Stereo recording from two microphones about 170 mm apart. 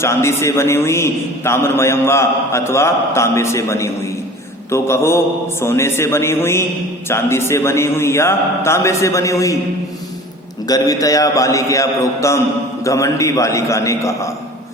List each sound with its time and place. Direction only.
0.0 s a man's voice: 15° left (ahead or behind)
10.7 s a man's voice: 20° left (ahead or behind)